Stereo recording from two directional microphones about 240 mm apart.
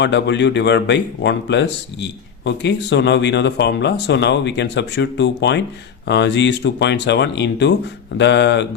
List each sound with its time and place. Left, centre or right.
0.0 s speech: left